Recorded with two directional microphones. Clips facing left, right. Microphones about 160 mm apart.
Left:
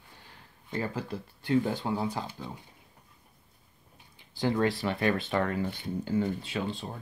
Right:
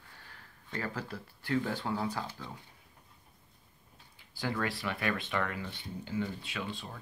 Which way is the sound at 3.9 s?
25° left (ahead or behind).